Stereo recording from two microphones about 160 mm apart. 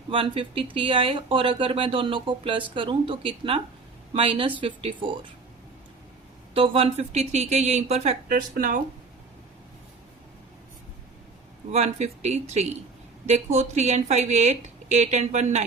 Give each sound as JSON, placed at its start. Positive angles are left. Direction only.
{"t": 0.1, "sound": "speech", "side_deg": -35}
{"t": 6.5, "sound": "a woman's voice", "side_deg": -35}
{"t": 8.3, "sound": "speech", "side_deg": -60}
{"t": 11.7, "sound": "a woman's voice", "side_deg": -45}